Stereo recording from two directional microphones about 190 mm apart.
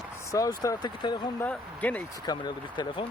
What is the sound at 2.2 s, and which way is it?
Speech, 20° left (ahead or behind).